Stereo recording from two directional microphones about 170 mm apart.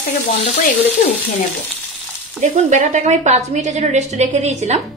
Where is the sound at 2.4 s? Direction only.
40° right (ahead or behind).